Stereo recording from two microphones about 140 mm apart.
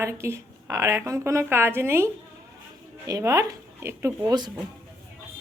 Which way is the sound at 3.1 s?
25° right (ahead or behind).